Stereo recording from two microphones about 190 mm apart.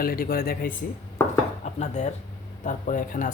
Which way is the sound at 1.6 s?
35° left (ahead or behind).